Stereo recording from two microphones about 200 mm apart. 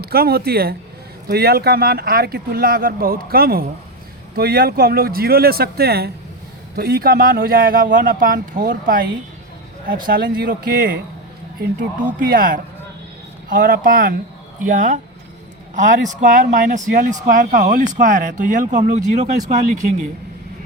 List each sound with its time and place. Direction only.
0.0 s speech: 50° right (ahead or behind)
12.3 s speech: 45° right (ahead or behind)